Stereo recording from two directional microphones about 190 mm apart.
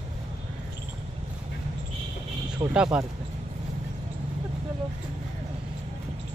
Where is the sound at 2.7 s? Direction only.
5° right (ahead or behind).